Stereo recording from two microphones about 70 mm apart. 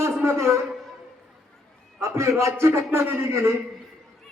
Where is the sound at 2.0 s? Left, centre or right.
Right.